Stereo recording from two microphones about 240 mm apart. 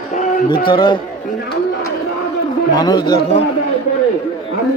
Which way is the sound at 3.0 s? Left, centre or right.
Left.